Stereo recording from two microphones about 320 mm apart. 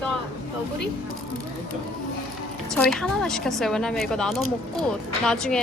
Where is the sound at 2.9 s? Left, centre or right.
Centre.